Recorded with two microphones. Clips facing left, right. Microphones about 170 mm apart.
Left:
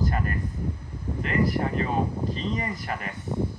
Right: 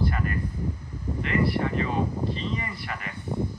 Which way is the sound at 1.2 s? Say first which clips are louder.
Even; 40° left (ahead or behind).